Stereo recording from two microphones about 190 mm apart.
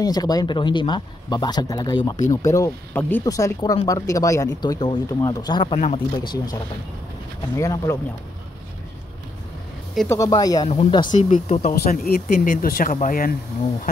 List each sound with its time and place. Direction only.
0.0 s a man's voice: 20° left (ahead or behind)
7.5 s speech: 15° left (ahead or behind)
10.0 s a man's voice: 15° left (ahead or behind)
11.1 s speech: 40° left (ahead or behind)